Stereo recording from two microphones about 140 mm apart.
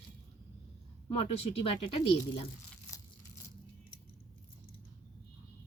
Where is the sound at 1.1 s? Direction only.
45° left (ahead or behind).